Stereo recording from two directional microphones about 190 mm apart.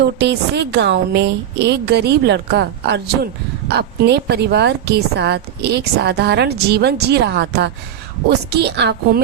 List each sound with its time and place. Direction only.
0.0 s a woman's voice: 65° right (ahead or behind)